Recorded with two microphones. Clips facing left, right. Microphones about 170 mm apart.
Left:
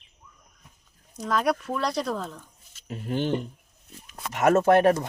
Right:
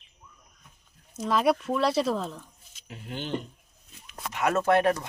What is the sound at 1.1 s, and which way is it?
Speech, centre (ahead or behind).